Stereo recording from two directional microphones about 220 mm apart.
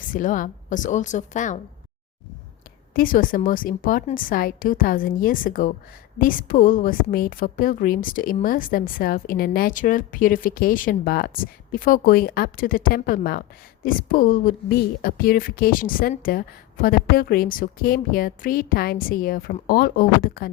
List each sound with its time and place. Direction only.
0.0 s a woman's voice: 35° left (ahead or behind)
2.9 s a woman's voice: 40° left (ahead or behind)